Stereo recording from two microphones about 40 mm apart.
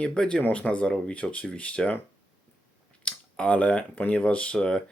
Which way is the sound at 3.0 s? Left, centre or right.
Left.